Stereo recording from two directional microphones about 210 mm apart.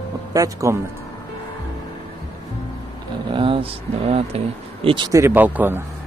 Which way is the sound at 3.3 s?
25° right (ahead or behind).